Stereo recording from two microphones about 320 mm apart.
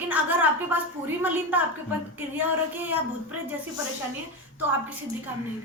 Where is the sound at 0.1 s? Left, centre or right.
Centre.